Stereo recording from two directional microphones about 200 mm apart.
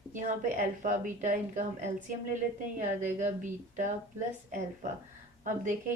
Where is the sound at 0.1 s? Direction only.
40° right (ahead or behind).